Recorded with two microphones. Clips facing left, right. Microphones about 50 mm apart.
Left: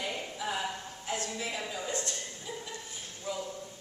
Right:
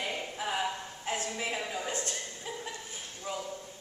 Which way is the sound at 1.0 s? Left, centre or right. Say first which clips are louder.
Right 1 dB; right.